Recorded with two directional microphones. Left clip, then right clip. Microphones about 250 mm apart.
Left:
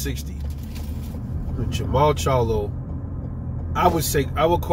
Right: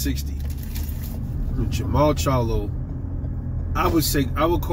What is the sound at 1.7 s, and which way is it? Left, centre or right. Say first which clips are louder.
Speech: left 1 dB; centre.